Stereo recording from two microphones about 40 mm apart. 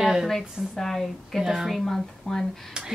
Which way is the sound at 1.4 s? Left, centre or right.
Centre.